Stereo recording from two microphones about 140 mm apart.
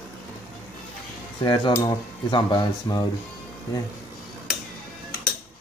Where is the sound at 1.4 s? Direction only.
30° left (ahead or behind).